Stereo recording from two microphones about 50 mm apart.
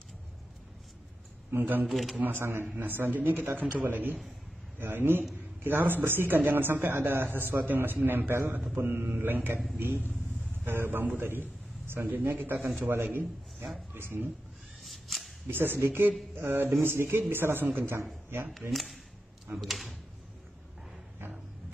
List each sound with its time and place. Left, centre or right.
1.6 s speech: right
1.9 s speech: centre
2.1 s a man's voice: right
14.9 s a sound: centre
15.4 s a man's voice: right
18.7 s speech: centre